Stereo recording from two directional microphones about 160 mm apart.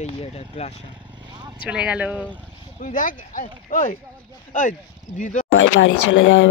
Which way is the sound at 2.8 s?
55° left (ahead or behind).